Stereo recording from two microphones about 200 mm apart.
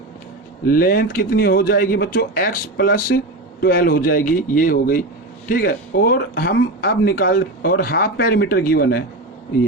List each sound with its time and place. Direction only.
0.7 s speech: 45° left (ahead or behind)